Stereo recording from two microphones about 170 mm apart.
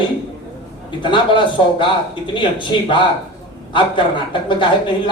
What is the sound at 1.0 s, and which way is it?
A man's voice, 30° left (ahead or behind).